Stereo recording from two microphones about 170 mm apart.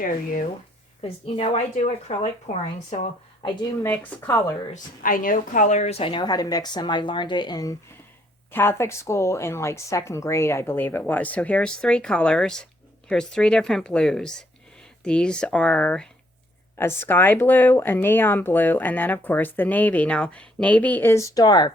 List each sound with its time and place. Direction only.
1.0 s speech: 40° left (ahead or behind)
3.4 s a woman's voice: 25° left (ahead or behind)
3.8 s speech: 15° left (ahead or behind)
4.7 s a woman's voice: 55° left (ahead or behind); by 21.7 s 25° left (ahead or behind)